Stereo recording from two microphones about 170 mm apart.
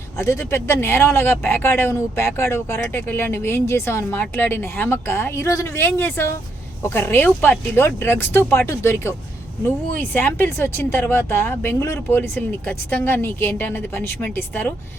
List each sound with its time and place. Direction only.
0.2 s speech: 15° left (ahead or behind)